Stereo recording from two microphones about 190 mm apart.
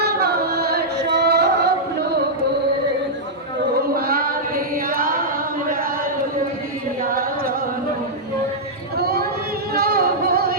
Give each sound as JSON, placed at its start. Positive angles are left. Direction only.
{"t": 0.0, "sound": "singing", "side_deg": -55}
{"t": 3.9, "sound": "chant", "side_deg": -50}
{"t": 7.1, "sound": "carnatic music", "side_deg": -50}
{"t": 9.0, "sound": "a sound", "side_deg": -55}
{"t": 9.7, "sound": "music", "side_deg": -55}